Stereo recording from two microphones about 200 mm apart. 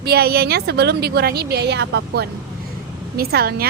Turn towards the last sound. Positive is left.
turn(degrees=-50)  # may be behind; listen again after turning